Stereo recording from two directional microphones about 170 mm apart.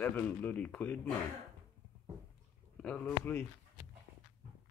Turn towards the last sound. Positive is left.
turn(degrees=15)  # may be behind; listen again after turning